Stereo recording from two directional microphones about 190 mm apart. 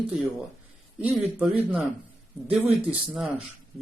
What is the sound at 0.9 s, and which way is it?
Speech, 5° right (ahead or behind).